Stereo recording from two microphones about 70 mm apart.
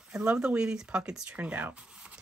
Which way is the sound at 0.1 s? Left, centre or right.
Centre.